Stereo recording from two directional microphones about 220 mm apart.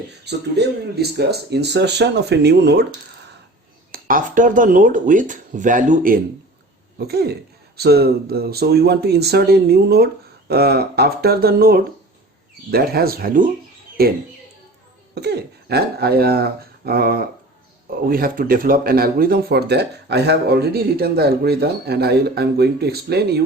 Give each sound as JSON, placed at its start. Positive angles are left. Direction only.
{"t": 0.3, "sound": "speech", "side_deg": -50}
{"t": 3.9, "sound": "speech", "side_deg": -40}